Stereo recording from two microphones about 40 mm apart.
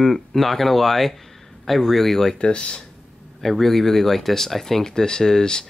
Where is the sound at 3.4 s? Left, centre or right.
Centre.